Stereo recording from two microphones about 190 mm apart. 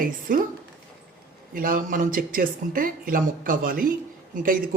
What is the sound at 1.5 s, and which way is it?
Speech, 45° right (ahead or behind).